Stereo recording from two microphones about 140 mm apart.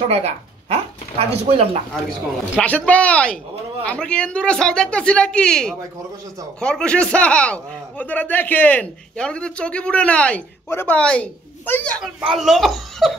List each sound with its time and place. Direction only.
0.1 s speech: 50° right (ahead or behind)
2.6 s speech: 10° left (ahead or behind)
12.0 s speech: centre (ahead or behind)